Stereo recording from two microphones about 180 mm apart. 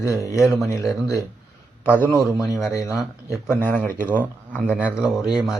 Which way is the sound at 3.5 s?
10° left (ahead or behind).